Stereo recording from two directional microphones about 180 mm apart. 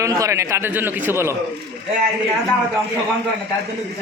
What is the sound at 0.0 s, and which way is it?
Speech, 20° right (ahead or behind).